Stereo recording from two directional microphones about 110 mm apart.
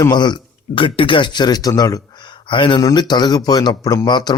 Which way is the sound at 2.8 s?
35° left (ahead or behind).